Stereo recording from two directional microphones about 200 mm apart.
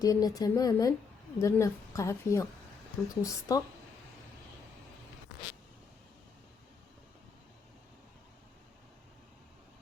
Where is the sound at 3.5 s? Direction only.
15° left (ahead or behind).